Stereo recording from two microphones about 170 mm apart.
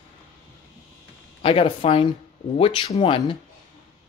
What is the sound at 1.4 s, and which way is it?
Speech, 30° left (ahead or behind).